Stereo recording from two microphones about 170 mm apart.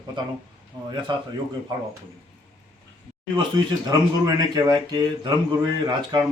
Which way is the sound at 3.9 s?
20° right (ahead or behind).